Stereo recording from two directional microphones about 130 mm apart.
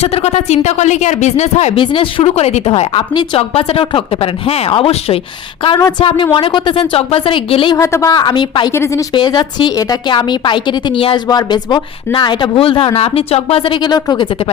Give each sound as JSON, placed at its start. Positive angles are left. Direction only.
{"t": 0.0, "sound": "speech", "side_deg": 55}
{"t": 1.7, "sound": "speech", "side_deg": 40}
{"t": 7.8, "sound": "speech", "side_deg": 20}
{"t": 8.1, "sound": "speech", "side_deg": 35}
{"t": 8.7, "sound": "speech", "side_deg": 20}
{"t": 9.1, "sound": "speech", "side_deg": 35}